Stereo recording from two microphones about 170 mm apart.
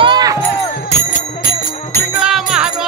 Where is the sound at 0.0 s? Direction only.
25° right (ahead or behind).